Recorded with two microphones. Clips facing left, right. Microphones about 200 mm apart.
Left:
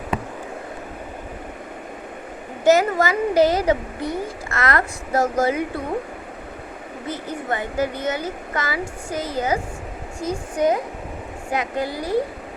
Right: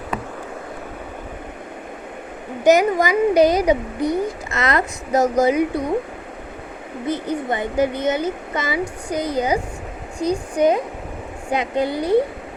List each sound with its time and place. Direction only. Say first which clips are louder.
2.6 s a child's voice: right 2 dB; 15° right (ahead or behind)
7.1 s a child's voice: right 4 dB; 20° right (ahead or behind)